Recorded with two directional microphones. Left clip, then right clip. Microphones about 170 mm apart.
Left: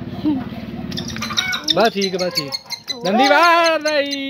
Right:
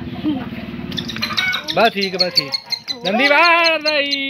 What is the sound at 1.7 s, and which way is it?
Speech, 30° left (ahead or behind).